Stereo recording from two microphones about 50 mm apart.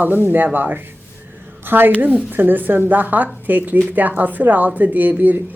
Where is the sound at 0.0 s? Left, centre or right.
Right.